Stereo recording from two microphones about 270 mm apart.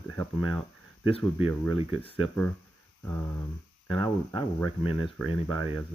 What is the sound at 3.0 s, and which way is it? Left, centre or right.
Speech, centre.